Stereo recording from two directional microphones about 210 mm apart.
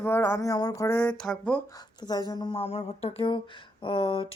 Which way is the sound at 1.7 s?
20° left (ahead or behind).